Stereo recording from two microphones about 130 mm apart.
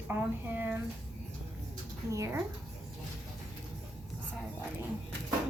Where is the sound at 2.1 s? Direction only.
25° right (ahead or behind).